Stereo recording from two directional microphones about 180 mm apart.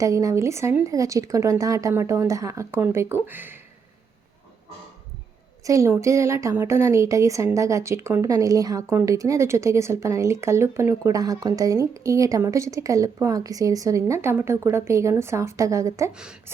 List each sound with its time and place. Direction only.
0.0 s speech: 20° right (ahead or behind)
5.6 s speech: 15° right (ahead or behind)
16.1 s a woman's voice: 5° right (ahead or behind)